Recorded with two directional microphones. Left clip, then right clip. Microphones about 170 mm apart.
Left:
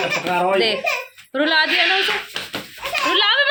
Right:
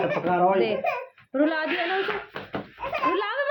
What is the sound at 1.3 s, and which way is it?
Speech, 5° left (ahead or behind).